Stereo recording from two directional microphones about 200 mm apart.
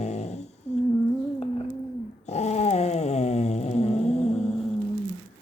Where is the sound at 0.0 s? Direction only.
35° left (ahead or behind).